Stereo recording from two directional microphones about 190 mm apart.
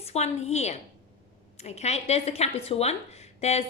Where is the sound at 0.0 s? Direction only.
35° left (ahead or behind).